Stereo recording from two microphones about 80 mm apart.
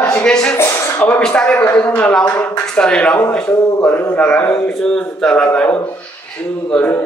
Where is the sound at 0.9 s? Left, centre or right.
Left.